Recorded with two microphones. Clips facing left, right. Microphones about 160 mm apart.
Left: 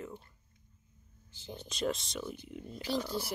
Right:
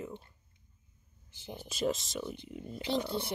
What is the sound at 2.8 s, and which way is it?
Speech, 20° right (ahead or behind).